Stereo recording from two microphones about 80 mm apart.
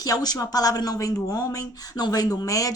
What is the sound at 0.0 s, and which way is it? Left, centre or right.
A woman's voice, left.